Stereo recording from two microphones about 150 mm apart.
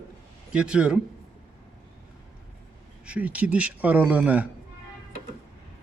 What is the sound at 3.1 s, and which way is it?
Speech, 10° right (ahead or behind).